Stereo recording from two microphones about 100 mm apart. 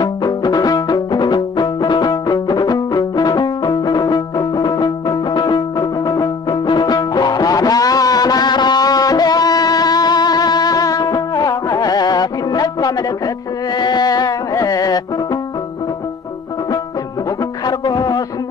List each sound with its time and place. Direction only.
0.0 s music: 40° left (ahead or behind)
17.6 s music: 45° left (ahead or behind)